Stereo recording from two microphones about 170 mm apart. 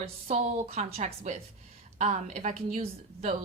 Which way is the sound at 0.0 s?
40° right (ahead or behind).